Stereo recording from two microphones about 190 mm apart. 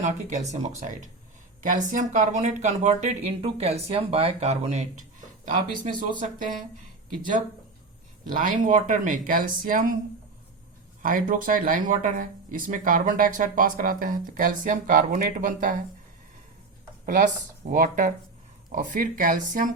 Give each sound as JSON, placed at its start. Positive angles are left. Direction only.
{"t": 0.0, "sound": "speech", "side_deg": -40}
{"t": 6.1, "sound": "speech", "side_deg": -45}
{"t": 8.3, "sound": "speech", "side_deg": -45}
{"t": 11.0, "sound": "speech", "side_deg": -45}
{"t": 17.1, "sound": "speech", "side_deg": -45}